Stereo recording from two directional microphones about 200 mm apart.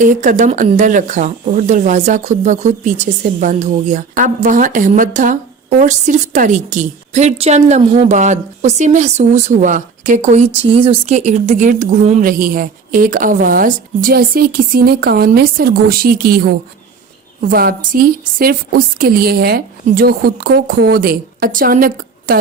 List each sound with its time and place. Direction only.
0.0 s a woman's voice: 40° right (ahead or behind)